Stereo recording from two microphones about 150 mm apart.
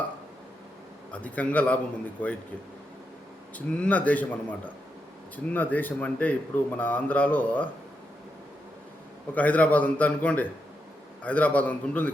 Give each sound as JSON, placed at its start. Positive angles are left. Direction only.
{"t": 1.1, "sound": "a man's voice", "side_deg": 10}
{"t": 3.8, "sound": "a man's voice", "side_deg": 10}
{"t": 9.3, "sound": "a man's voice", "side_deg": 10}